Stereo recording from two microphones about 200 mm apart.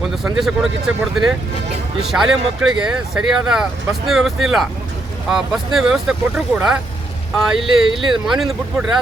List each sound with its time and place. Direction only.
0.3 s speech: centre (ahead or behind)